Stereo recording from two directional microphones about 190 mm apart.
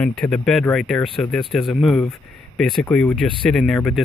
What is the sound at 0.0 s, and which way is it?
Speech, 5° left (ahead or behind).